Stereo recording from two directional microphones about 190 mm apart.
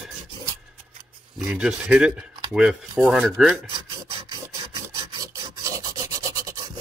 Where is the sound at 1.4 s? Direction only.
5° right (ahead or behind).